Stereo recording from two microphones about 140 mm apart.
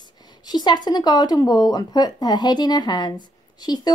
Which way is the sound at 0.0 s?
30° left (ahead or behind).